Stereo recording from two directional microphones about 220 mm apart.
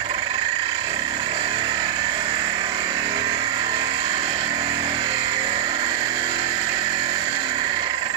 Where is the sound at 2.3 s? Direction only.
20° right (ahead or behind).